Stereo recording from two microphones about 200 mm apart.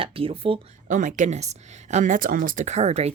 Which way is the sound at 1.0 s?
40° right (ahead or behind).